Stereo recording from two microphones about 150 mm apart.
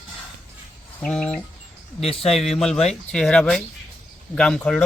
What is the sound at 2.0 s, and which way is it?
Speech, 40° left (ahead or behind).